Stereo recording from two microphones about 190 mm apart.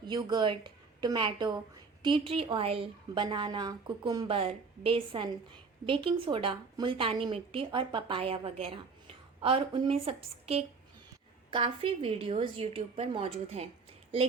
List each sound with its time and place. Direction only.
0.1 s a woman's voice: 20° right (ahead or behind)